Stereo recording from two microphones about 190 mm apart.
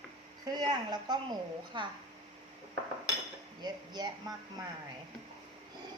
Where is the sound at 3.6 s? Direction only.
20° right (ahead or behind).